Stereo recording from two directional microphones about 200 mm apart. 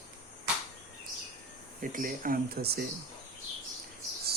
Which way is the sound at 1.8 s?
45° right (ahead or behind).